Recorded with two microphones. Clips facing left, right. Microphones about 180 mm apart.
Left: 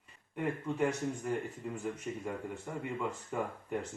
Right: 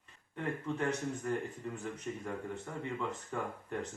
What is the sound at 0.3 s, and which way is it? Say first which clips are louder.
Speech: left 3 dB; 10° left (ahead or behind).